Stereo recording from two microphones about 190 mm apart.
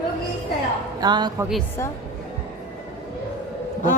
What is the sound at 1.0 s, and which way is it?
Speech, 20° right (ahead or behind).